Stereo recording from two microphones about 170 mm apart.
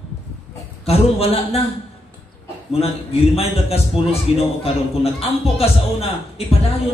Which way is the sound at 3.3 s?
35° left (ahead or behind).